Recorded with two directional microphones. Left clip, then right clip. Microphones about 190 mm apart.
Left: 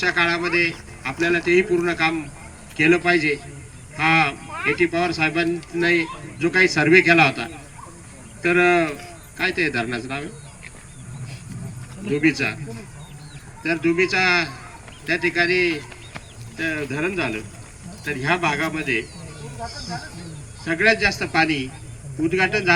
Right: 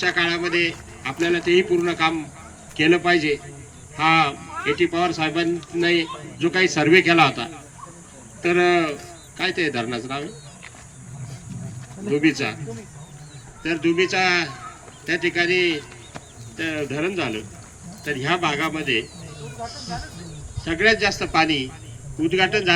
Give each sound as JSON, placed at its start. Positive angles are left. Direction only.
{"t": 0.0, "sound": "speech", "side_deg": 20}
{"t": 12.1, "sound": "speech", "side_deg": 20}
{"t": 13.6, "sound": "speech", "side_deg": 20}
{"t": 20.7, "sound": "speech", "side_deg": 25}